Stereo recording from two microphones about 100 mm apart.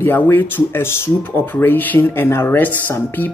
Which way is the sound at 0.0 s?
20° left (ahead or behind).